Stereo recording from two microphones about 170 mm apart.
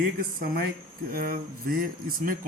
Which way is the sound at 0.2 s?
60° right (ahead or behind).